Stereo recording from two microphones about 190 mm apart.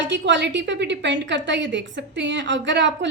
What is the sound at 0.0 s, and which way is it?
A woman's voice, 70° right (ahead or behind).